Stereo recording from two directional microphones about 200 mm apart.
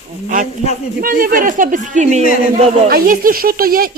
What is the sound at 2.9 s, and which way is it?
Speech, 45° right (ahead or behind).